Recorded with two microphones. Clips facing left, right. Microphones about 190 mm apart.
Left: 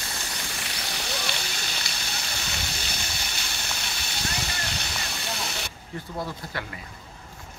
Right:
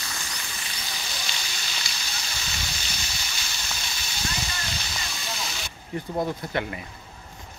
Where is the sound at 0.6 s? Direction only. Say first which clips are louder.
Left 3 dB; 65° left (ahead or behind).